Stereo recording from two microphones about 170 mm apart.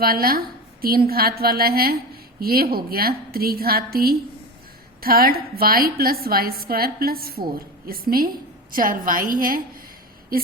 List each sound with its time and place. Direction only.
0.0 s a woman's voice: 60° right (ahead or behind)